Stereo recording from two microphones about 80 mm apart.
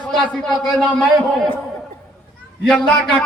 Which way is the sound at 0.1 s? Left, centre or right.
Centre.